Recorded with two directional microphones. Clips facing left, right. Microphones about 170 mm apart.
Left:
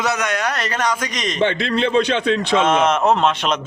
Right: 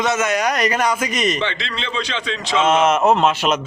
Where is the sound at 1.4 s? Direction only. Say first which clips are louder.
Left 8 dB; 50° left (ahead or behind).